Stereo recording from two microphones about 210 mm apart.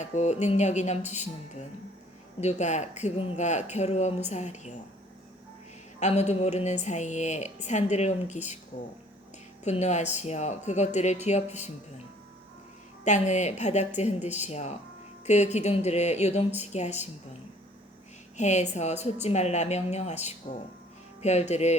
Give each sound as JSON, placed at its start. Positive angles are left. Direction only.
{"t": 0.0, "sound": "a woman's voice", "side_deg": 35}
{"t": 6.0, "sound": "a woman's voice", "side_deg": 30}
{"t": 9.6, "sound": "a woman's voice", "side_deg": 30}
{"t": 13.1, "sound": "a woman's voice", "side_deg": 35}
{"t": 18.3, "sound": "a woman's voice", "side_deg": 35}